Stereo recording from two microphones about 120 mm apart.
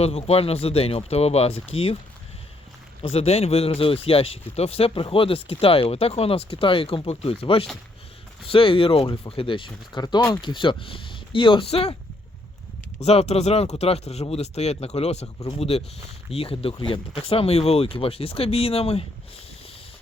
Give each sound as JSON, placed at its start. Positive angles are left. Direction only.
{"t": 0.0, "sound": "speech", "side_deg": 55}
{"t": 3.0, "sound": "speech", "side_deg": 55}
{"t": 13.0, "sound": "speech", "side_deg": 60}